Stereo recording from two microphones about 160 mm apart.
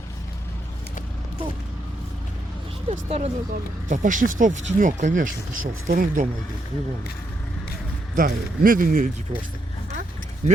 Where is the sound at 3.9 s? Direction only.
55° right (ahead or behind).